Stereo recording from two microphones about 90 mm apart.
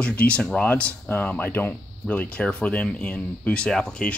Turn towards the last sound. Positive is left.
turn(degrees=10)  # may be behind; listen again after turning